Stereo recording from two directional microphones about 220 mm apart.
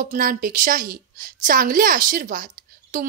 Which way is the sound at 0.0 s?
40° right (ahead or behind).